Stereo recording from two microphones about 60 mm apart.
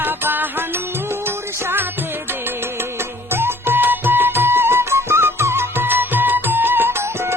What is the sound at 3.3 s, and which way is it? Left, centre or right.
Music, right.